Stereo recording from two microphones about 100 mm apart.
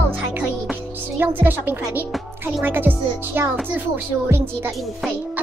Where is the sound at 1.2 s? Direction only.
20° right (ahead or behind).